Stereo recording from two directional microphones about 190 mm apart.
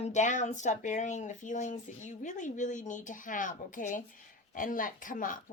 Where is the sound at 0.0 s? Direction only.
40° left (ahead or behind).